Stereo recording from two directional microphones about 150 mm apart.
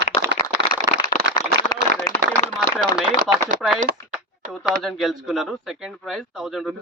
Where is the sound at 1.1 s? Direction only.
55° left (ahead or behind).